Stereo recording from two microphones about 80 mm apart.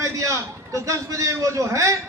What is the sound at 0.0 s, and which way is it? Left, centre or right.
A man's voice, right.